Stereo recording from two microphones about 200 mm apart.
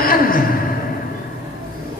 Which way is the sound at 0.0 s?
45° left (ahead or behind).